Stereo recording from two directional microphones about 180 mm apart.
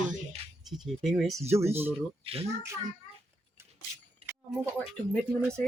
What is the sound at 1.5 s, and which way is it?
Speech, 15° right (ahead or behind).